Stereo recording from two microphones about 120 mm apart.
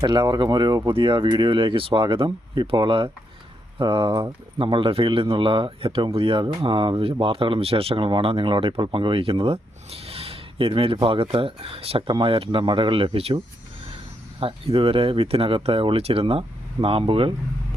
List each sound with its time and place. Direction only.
0.0 s speech: 40° right (ahead or behind)